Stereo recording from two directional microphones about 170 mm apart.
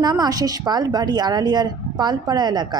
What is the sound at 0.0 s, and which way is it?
Speech, 25° right (ahead or behind).